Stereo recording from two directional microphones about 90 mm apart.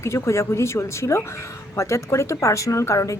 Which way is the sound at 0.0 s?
35° left (ahead or behind).